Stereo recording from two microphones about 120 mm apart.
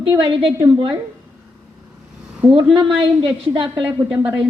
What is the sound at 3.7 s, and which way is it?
Speech, 15° right (ahead or behind).